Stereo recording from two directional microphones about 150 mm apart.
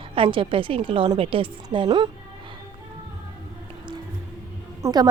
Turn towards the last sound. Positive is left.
turn(degrees=-25)  # may be behind; listen again after turning